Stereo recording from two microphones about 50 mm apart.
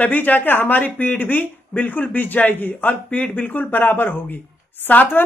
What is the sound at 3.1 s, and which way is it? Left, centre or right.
Speech, left.